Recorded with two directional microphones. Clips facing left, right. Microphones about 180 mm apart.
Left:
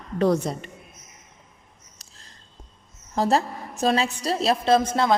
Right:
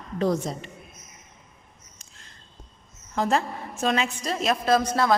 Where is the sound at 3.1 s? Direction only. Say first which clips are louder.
Left 2 dB; 35° left (ahead or behind).